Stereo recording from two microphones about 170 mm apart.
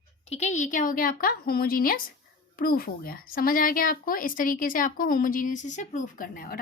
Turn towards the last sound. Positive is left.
turn(degrees=60)  # may be behind; listen again after turning